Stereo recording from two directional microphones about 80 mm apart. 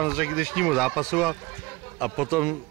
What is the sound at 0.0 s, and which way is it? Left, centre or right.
Speech, centre.